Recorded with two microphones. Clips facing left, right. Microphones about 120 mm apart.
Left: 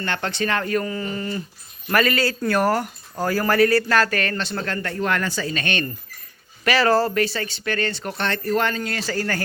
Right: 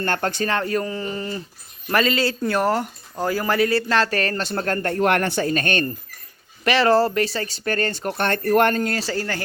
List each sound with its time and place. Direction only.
0.0 s speech: 45° right (ahead or behind)
0.5 s a man's voice: 30° right (ahead or behind); by 4.9 s 45° right (ahead or behind)
4.9 s speech: 65° right (ahead or behind); by 5.9 s 45° right (ahead or behind)
6.7 s a man's voice: 25° right (ahead or behind)